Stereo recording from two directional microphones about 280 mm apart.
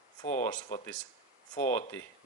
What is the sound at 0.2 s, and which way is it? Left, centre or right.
Speech, left.